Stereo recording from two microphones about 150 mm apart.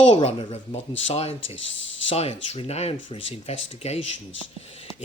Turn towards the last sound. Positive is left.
turn(degrees=45)  # may be behind; listen again after turning